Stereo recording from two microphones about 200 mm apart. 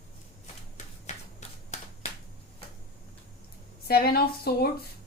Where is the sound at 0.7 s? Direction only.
35° left (ahead or behind).